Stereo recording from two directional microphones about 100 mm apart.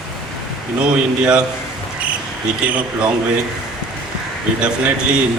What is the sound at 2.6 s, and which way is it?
Speech, 15° right (ahead or behind).